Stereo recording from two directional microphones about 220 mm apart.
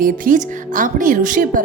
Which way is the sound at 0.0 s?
35° right (ahead or behind).